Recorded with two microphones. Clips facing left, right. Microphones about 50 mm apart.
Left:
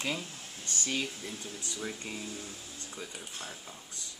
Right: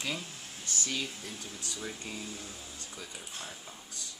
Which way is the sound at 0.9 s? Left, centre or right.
Centre.